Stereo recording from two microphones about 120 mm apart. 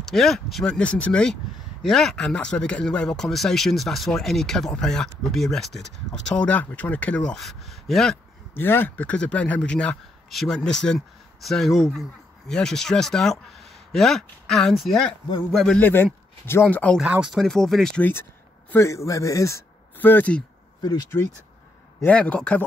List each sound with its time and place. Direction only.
0.0 s speech: centre (ahead or behind)
8.5 s speech: 15° left (ahead or behind)
15.8 s speech: 15° left (ahead or behind)
17.0 s speech: 10° right (ahead or behind)
17.4 s speech: 5° left (ahead or behind)
18.7 s a man's voice: 25° left (ahead or behind)
20.8 s speech: 30° left (ahead or behind)
22.0 s speech: 10° left (ahead or behind)